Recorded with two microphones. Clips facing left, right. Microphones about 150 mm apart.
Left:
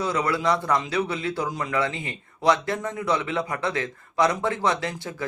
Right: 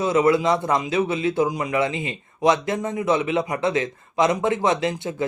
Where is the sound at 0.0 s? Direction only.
20° right (ahead or behind).